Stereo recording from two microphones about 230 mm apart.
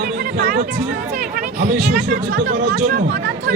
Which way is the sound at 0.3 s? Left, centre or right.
Right.